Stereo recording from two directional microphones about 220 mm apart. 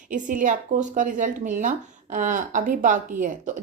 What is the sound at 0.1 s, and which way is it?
Speech, 35° right (ahead or behind).